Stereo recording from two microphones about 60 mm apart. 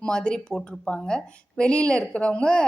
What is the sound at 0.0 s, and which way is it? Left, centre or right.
A woman's voice, centre.